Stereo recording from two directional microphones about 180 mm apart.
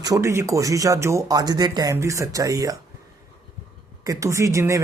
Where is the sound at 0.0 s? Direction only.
20° right (ahead or behind).